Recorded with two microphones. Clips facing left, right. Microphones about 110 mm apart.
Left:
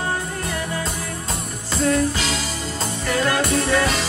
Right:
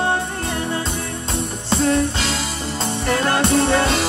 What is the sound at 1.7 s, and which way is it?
Music, 30° right (ahead or behind).